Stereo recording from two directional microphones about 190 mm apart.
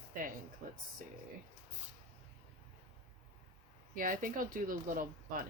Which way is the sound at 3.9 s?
45° right (ahead or behind).